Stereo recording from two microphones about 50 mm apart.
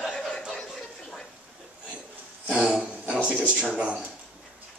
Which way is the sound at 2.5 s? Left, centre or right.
Centre.